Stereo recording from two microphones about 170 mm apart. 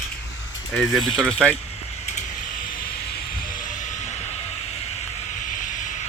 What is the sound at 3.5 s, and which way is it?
Vehicle, 45° left (ahead or behind).